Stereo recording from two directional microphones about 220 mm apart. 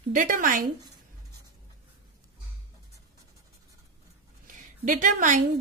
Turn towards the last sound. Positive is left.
turn(degrees=-35)  # may be behind; listen again after turning